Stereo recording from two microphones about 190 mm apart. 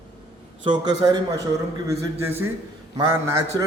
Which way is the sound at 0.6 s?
25° right (ahead or behind).